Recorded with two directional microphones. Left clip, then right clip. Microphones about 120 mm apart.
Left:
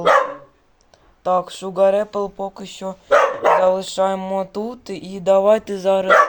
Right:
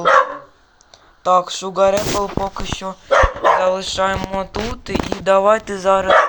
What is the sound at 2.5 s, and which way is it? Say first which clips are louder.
Speech: right 4 dB; 30° left (ahead or behind).